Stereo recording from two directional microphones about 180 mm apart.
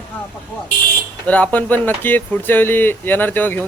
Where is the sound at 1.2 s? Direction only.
10° left (ahead or behind).